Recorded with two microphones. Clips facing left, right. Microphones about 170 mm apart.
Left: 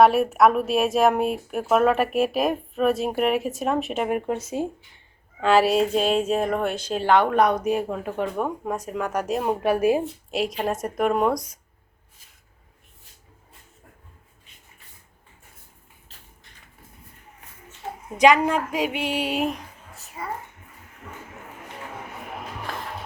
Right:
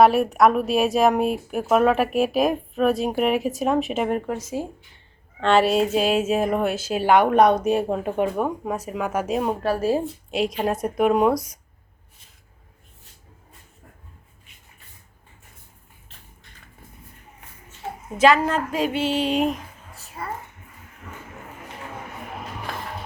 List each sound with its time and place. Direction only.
0.0 s speech: centre (ahead or behind)
4.6 s speech: 20° left (ahead or behind)
5.4 s speech: 5° left (ahead or behind); by 8.3 s 25° right (ahead or behind)
8.4 s speech: centre (ahead or behind)
9.6 s a sound: 15° left (ahead or behind)
10.3 s speech: centre (ahead or behind)
18.4 s a sound: 10° left (ahead or behind)